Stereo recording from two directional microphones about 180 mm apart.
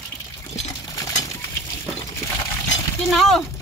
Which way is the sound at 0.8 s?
20° left (ahead or behind).